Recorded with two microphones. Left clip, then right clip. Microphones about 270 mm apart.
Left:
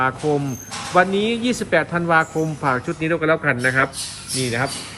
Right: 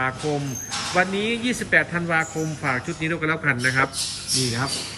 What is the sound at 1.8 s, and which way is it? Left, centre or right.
Speech, left.